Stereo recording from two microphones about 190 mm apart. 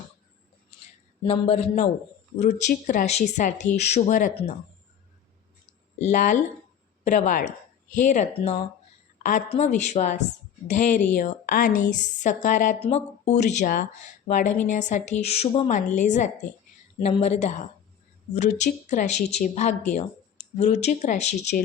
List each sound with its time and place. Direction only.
1.2 s a woman's voice: 30° left (ahead or behind)
6.0 s a woman's voice: 40° left (ahead or behind)
9.5 s a woman's voice: 35° left (ahead or behind)